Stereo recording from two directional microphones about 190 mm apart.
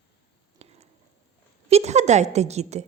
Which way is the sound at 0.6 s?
35° right (ahead or behind).